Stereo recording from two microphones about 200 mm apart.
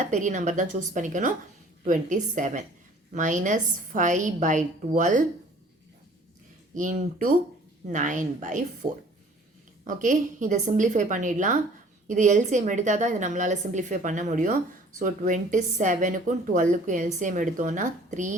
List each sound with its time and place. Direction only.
0.0 s a woman's voice: 40° right (ahead or behind)
6.7 s a woman's voice: 40° right (ahead or behind)